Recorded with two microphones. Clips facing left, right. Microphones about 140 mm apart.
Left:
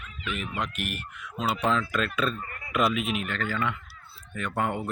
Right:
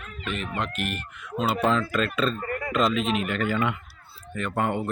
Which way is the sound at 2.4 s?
50° right (ahead or behind).